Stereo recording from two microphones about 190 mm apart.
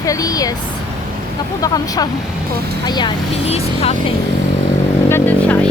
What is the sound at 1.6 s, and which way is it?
Speech, 20° left (ahead or behind).